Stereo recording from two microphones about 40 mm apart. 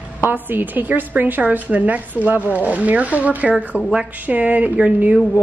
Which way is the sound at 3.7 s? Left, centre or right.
Right.